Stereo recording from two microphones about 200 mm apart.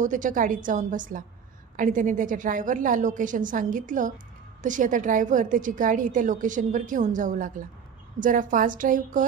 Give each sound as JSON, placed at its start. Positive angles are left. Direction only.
{"t": 0.0, "sound": "a woman's voice", "side_deg": -40}